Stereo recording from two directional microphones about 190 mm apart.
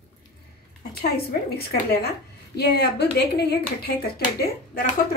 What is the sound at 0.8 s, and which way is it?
Speech, 55° left (ahead or behind).